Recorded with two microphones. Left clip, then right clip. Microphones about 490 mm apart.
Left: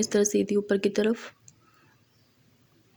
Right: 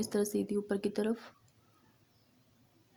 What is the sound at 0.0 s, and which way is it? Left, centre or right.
Speech, left.